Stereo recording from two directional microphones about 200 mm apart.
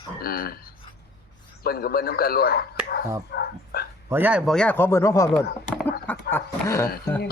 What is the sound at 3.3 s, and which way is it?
Dog, 50° left (ahead or behind).